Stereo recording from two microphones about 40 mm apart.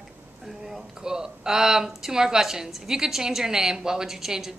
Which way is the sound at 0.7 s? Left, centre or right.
Centre.